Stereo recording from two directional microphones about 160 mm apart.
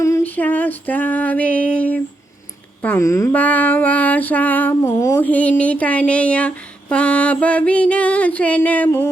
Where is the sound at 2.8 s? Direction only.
15° left (ahead or behind).